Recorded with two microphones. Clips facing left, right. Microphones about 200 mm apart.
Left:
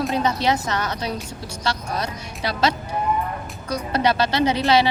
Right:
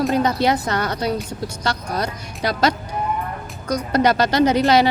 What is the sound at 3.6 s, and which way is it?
Speech, 30° left (ahead or behind).